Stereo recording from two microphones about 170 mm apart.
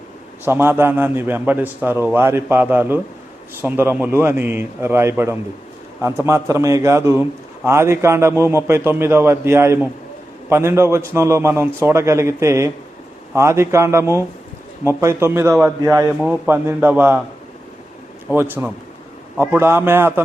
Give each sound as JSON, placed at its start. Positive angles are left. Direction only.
{"t": 0.4, "sound": "a man's voice", "side_deg": -15}
{"t": 18.3, "sound": "a man's voice", "side_deg": -10}